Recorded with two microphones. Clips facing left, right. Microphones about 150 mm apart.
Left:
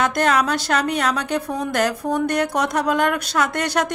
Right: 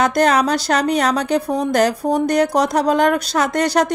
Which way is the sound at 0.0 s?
40° right (ahead or behind).